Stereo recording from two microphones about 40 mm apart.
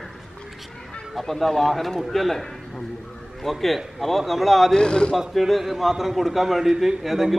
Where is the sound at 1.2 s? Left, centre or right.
Centre.